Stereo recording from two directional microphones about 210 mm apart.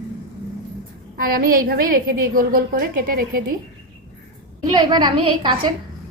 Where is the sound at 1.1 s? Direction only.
45° right (ahead or behind).